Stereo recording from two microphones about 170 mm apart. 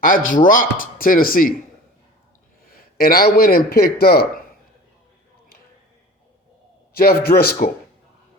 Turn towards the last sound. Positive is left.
turn(degrees=60)  # may be behind; listen again after turning